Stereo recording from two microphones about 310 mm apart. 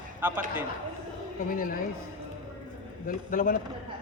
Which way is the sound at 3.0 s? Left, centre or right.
Left.